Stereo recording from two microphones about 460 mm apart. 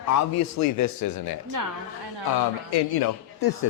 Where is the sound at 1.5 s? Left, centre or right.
Right.